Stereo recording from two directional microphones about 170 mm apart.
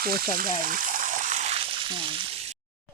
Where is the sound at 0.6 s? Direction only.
55° right (ahead or behind); by 1.9 s 35° right (ahead or behind).